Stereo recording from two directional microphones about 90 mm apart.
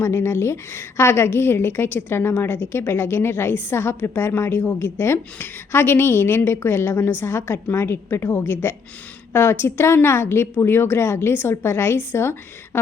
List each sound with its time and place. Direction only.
0.0 s a woman's voice: 30° left (ahead or behind)